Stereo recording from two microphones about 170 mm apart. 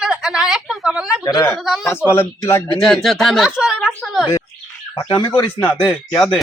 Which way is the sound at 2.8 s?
Centre (ahead or behind).